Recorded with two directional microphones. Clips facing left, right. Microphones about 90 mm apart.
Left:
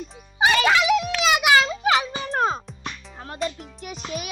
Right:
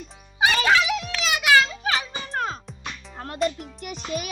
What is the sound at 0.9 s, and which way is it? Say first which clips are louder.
Music: left 6 dB; 20° left (ahead or behind).